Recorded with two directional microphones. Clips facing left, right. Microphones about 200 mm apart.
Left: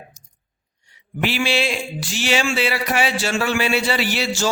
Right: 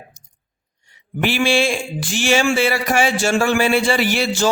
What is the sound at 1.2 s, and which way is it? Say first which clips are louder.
Speech: right 4 dB; 50° right (ahead or behind).